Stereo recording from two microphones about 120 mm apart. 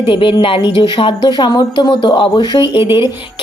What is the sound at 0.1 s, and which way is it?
A woman's voice, 45° left (ahead or behind).